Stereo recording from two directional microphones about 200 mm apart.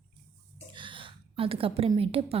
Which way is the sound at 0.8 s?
25° right (ahead or behind).